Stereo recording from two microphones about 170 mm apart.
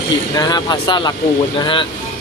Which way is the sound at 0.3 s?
25° left (ahead or behind).